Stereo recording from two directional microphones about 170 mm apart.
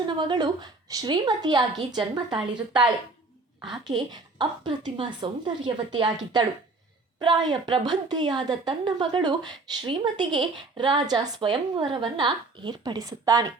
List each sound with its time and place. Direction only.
0.0 s a woman's voice: 25° right (ahead or behind)
3.6 s a woman's voice: centre (ahead or behind)
4.1 s a woman's voice: 25° right (ahead or behind)